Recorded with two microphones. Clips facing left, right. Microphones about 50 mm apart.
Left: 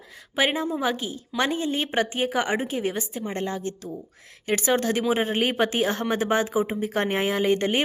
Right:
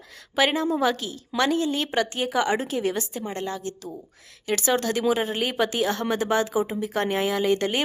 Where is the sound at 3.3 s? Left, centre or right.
Left.